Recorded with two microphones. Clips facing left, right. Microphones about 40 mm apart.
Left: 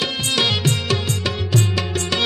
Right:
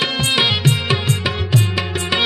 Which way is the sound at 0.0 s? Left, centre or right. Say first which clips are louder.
Right 3 dB; right.